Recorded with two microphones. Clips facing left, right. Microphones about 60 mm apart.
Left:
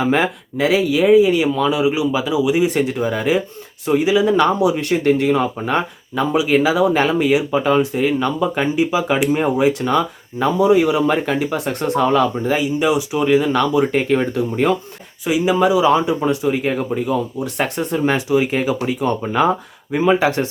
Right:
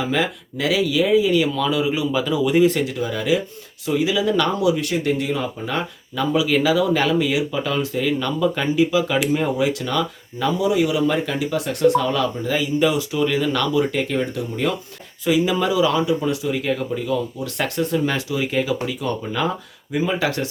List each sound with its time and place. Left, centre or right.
0.0 s speech: left; by 2.7 s centre
2.7 s speech: left
4.7 s speech: left
6.3 s speech: left
13.9 s speech: left
15.2 s speech: centre